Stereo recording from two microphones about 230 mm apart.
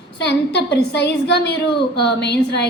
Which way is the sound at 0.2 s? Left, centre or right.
Left.